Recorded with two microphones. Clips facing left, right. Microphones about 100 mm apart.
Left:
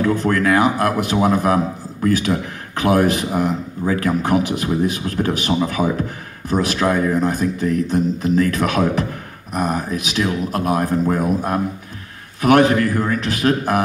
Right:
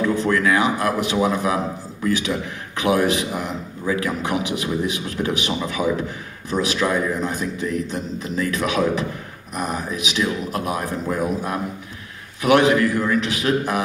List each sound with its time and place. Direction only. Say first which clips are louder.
0.0 s speech: left 2 dB; 50° left (ahead or behind)